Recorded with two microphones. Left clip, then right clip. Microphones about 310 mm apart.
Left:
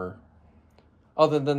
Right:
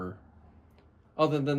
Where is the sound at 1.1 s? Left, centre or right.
Centre.